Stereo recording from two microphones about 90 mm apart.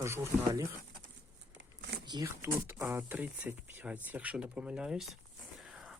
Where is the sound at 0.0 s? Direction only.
35° right (ahead or behind).